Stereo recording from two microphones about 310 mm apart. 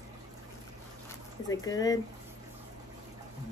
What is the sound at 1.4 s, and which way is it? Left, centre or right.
Speech, centre.